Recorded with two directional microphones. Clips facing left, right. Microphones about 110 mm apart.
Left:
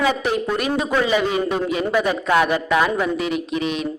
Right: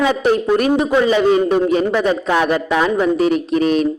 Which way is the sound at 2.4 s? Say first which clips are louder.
Right 2 dB; 35° right (ahead or behind).